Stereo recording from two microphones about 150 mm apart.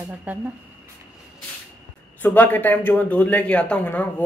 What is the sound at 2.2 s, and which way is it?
Speech, 10° left (ahead or behind).